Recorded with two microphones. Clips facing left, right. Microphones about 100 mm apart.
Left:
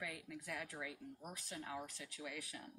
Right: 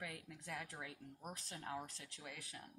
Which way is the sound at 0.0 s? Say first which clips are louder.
Left 2 dB; 30° right (ahead or behind).